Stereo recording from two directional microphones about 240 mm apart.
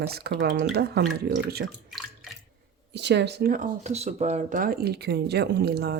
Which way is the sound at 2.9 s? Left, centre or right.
Right.